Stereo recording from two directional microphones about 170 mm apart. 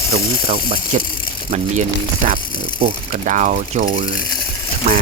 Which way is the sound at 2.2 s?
55° right (ahead or behind).